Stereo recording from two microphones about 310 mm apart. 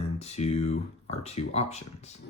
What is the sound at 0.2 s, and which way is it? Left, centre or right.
Speech, left.